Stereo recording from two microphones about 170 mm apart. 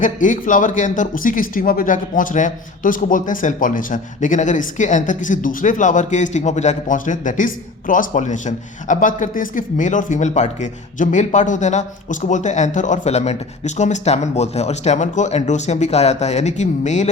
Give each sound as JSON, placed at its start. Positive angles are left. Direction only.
{"t": 0.0, "sound": "speech", "side_deg": 50}